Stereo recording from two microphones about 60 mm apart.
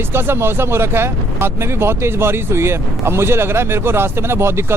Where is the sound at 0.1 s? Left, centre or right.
Right.